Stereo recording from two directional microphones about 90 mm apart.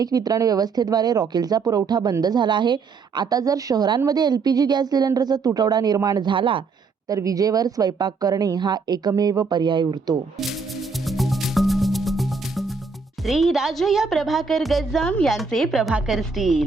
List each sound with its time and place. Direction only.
0.0 s a woman's voice: 45° right (ahead or behind); by 6.7 s 70° right (ahead or behind)
7.1 s a woman's voice: 40° right (ahead or behind)
9.5 s speech: 60° right (ahead or behind)
10.3 s music: centre (ahead or behind)
13.2 s a woman's voice: centre (ahead or behind)